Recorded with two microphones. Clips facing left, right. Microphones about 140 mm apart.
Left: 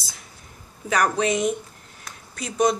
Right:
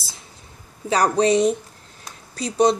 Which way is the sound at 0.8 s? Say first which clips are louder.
Right 4 dB; 30° right (ahead or behind).